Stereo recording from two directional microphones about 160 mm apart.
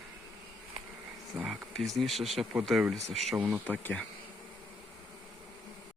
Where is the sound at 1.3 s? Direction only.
5° right (ahead or behind).